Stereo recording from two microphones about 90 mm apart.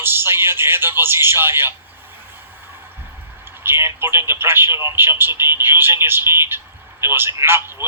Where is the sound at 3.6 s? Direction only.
25° right (ahead or behind).